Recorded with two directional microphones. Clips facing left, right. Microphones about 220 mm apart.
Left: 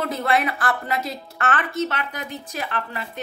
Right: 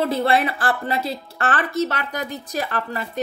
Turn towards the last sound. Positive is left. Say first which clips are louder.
# right 4 dB
turn(degrees=-40)  # may be behind; listen again after turning